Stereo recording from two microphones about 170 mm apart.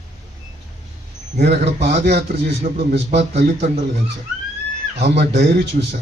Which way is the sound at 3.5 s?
45° right (ahead or behind).